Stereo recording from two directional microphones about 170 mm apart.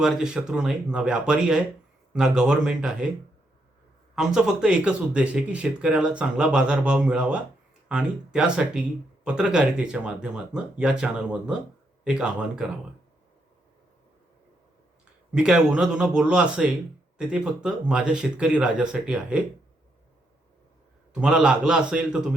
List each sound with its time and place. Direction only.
0.0 s speech: 5° right (ahead or behind)
4.1 s speech: 5° right (ahead or behind)
15.3 s speech: 5° right (ahead or behind)
21.2 s speech: 5° right (ahead or behind)